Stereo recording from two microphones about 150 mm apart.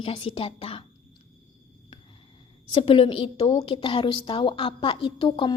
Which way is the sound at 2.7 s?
35° left (ahead or behind).